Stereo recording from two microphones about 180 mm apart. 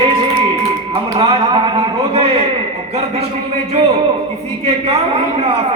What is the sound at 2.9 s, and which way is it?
Speech, 35° right (ahead or behind).